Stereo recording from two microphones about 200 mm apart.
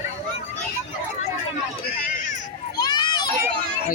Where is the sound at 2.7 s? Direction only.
20° left (ahead or behind).